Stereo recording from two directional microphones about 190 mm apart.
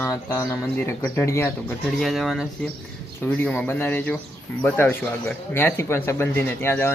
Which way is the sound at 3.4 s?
5° left (ahead or behind).